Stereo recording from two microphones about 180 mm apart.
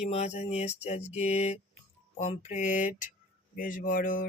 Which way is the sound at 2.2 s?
40° left (ahead or behind).